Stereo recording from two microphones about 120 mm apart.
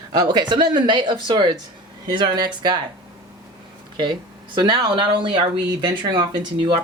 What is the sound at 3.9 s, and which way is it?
Speech, 40° right (ahead or behind).